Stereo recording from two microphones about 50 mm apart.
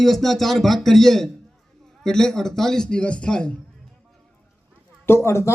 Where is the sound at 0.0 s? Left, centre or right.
Centre.